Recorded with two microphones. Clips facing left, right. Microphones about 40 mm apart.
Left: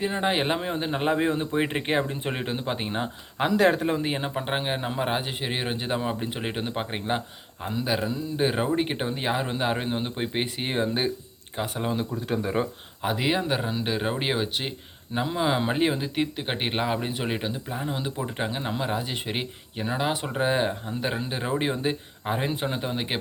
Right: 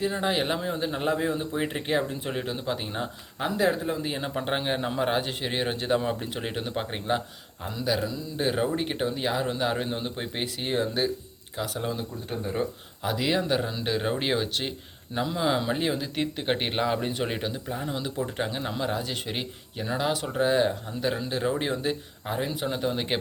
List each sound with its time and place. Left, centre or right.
0.0 s speech: left
3.4 s speech: left
4.4 s speech: centre; by 11.8 s left
12.3 s speech: left
13.0 s speech: left
16.1 s speech: centre
21.8 s speech: left
22.4 s speech: left
22.7 s speech: centre